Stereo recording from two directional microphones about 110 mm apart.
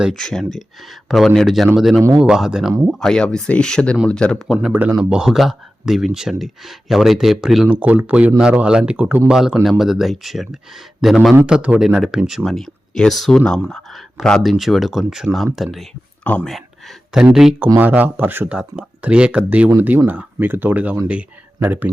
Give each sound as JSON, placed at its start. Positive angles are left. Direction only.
{"t": 0.0, "sound": "speech", "side_deg": 5}
{"t": 4.5, "sound": "speech", "side_deg": -10}
{"t": 9.6, "sound": "speech", "side_deg": 0}
{"t": 16.2, "sound": "speech", "side_deg": 15}
{"t": 17.1, "sound": "speech", "side_deg": -5}